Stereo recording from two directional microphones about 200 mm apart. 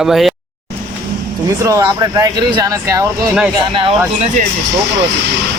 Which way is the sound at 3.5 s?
25° right (ahead or behind).